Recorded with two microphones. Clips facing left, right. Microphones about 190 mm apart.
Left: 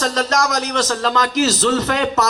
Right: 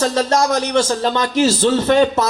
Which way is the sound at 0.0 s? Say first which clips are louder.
Right 3 dB; 30° right (ahead or behind).